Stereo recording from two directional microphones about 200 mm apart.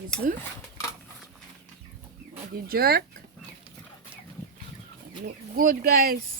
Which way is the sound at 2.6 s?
50° right (ahead or behind).